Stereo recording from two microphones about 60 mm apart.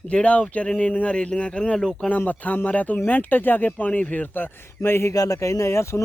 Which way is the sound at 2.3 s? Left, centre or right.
Left.